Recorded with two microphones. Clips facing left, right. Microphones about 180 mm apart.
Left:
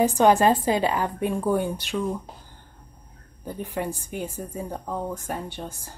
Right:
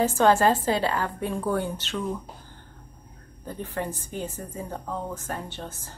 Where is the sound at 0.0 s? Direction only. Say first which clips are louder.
Left 2 dB; 15° left (ahead or behind).